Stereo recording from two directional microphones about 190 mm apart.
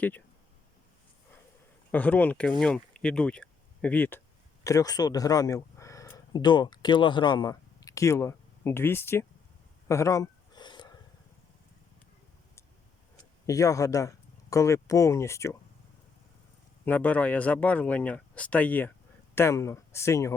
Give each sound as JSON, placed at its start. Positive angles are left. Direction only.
{"t": 1.9, "sound": "speech", "side_deg": 10}
{"t": 9.9, "sound": "a sound", "side_deg": 15}
{"t": 13.5, "sound": "speech", "side_deg": 15}
{"t": 16.8, "sound": "speech", "side_deg": 10}